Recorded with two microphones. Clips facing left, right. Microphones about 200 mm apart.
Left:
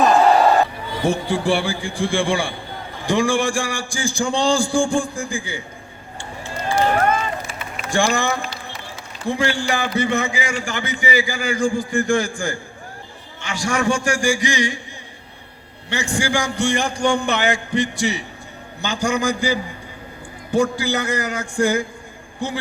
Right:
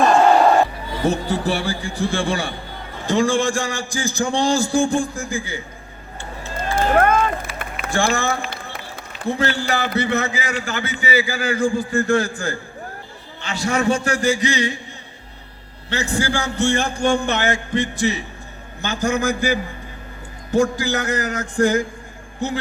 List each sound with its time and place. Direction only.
0.0 s a sound: centre (ahead or behind)
3.1 s a man's voice: 15° left (ahead or behind)
6.7 s run: 55° right (ahead or behind)
7.9 s speech: 15° left (ahead or behind)
8.4 s run: 55° right (ahead or behind)
9.2 s a man's voice: 15° left (ahead or behind)
15.9 s a man's voice: 15° left (ahead or behind)